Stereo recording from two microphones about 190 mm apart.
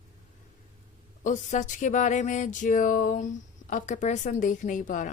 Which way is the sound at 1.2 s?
40° left (ahead or behind).